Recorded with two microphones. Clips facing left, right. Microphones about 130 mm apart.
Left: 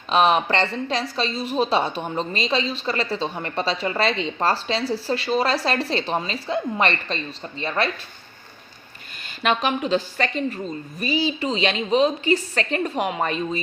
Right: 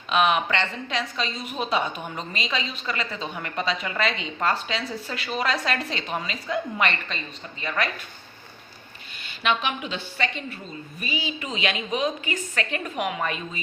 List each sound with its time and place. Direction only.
0.1 s a woman's voice: 35° left (ahead or behind)
9.2 s a woman's voice: 40° left (ahead or behind)